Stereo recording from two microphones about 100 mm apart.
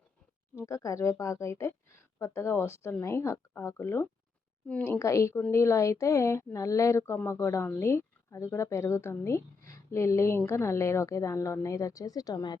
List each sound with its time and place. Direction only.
0.5 s speech: 30° left (ahead or behind)